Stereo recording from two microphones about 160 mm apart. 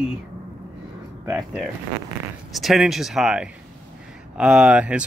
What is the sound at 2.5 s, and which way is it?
Speech, centre (ahead or behind).